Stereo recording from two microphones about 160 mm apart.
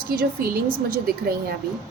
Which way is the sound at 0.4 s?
65° right (ahead or behind).